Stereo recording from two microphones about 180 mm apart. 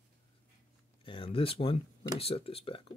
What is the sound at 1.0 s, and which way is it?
Speech, 30° left (ahead or behind).